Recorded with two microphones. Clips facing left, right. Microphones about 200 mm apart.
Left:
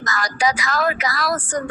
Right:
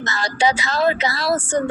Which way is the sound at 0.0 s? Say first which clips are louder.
Right 2 dB; 25° right (ahead or behind).